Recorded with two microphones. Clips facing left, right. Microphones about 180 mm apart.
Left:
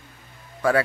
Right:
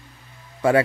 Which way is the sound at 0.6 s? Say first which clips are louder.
Right 3 dB; 25° right (ahead or behind).